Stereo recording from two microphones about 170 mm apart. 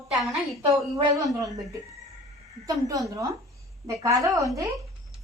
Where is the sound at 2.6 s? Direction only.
20° right (ahead or behind).